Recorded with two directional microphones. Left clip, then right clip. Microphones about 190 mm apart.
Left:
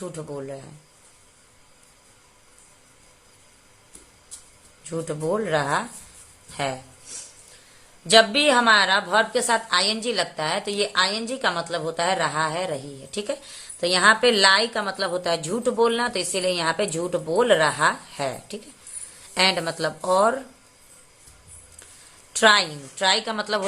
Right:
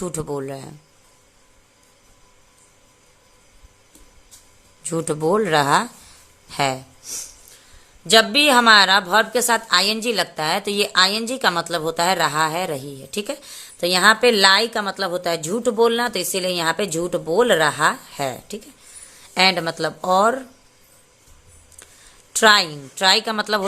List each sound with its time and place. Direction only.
0.0 s speech: 40° right (ahead or behind)
4.8 s speech: 40° right (ahead or behind)
8.0 s a woman's voice: 25° right (ahead or behind)
22.3 s a woman's voice: 25° right (ahead or behind)